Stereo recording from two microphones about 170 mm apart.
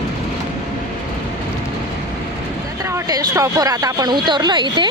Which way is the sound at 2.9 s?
20° right (ahead or behind).